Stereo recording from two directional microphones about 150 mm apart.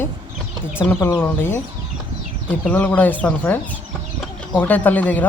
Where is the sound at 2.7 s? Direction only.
10° left (ahead or behind).